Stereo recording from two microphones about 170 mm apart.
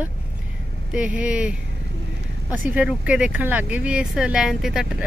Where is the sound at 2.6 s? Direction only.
10° right (ahead or behind).